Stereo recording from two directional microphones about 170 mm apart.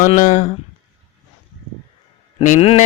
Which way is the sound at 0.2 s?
45° left (ahead or behind).